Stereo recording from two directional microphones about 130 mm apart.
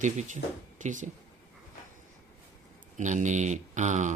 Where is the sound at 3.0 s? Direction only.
70° right (ahead or behind).